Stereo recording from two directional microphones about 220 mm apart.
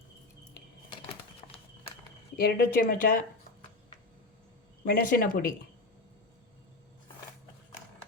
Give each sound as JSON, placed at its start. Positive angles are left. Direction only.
{"t": 2.4, "sound": "speech", "side_deg": 40}
{"t": 4.9, "sound": "speech", "side_deg": 40}